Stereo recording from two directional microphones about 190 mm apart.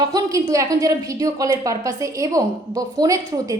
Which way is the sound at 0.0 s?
20° right (ahead or behind).